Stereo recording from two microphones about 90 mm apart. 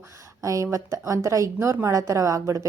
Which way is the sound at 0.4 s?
35° right (ahead or behind).